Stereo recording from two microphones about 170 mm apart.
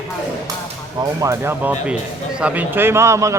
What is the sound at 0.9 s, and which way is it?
Speech, 20° right (ahead or behind).